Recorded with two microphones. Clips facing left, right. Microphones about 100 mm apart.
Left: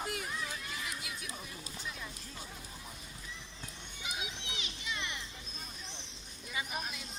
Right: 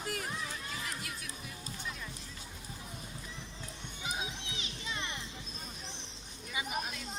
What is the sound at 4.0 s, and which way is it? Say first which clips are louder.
Children playing: right 3 dB; 30° right (ahead or behind).